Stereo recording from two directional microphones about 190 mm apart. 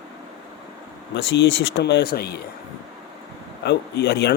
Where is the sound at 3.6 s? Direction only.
60° left (ahead or behind).